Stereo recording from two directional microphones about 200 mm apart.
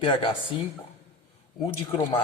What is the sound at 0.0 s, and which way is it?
Speech, 25° left (ahead or behind).